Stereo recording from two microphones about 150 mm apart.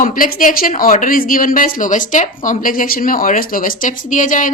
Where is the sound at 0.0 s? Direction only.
65° left (ahead or behind).